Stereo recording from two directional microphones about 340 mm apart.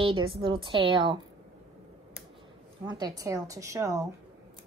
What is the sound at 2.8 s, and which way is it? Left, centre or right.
A woman's voice, centre.